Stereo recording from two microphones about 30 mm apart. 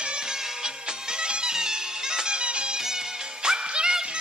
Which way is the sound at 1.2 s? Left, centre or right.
Right.